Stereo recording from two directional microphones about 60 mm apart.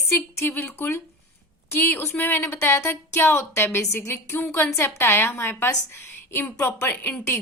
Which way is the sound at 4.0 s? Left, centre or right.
Left.